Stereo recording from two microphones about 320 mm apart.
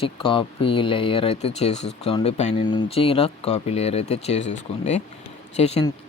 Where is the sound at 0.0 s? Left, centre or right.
Centre.